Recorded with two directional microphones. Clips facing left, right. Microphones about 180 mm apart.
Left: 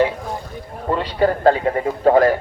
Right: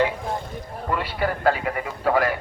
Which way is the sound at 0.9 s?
35° left (ahead or behind).